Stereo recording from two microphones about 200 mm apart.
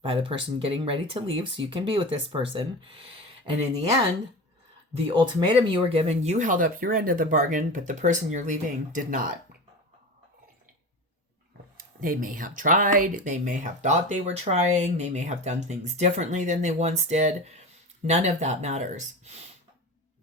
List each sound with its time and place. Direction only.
0.0 s speech: 25° right (ahead or behind)
4.9 s speech: 25° right (ahead or behind); by 9.2 s 40° right (ahead or behind)
11.8 s speech: 45° right (ahead or behind)